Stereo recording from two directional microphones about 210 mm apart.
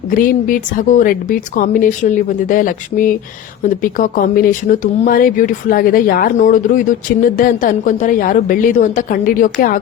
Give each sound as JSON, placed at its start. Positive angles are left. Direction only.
{"t": 0.1, "sound": "speech", "side_deg": 40}